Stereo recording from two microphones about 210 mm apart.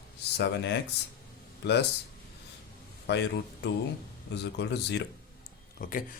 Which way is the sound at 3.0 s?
55° left (ahead or behind).